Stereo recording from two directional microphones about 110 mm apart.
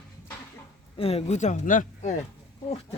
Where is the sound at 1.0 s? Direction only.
65° left (ahead or behind); by 1.6 s 90° left.